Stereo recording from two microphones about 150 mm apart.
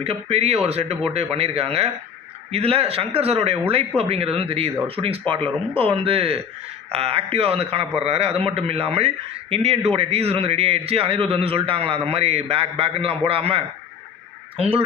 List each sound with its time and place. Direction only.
0.0 s a man's voice: 40° right (ahead or behind)